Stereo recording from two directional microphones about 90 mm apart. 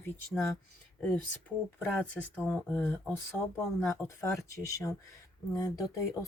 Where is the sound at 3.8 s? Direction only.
35° left (ahead or behind).